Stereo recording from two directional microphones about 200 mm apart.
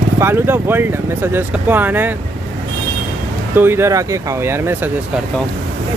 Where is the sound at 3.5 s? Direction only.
10° right (ahead or behind).